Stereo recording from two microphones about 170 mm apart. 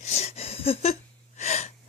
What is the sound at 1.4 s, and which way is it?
Gasp, 40° left (ahead or behind).